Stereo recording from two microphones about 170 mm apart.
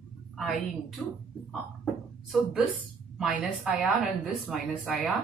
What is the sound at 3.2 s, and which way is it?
A woman's voice, 5° right (ahead or behind).